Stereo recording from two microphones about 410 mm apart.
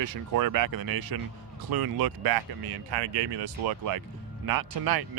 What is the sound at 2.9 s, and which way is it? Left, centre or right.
Speech, right.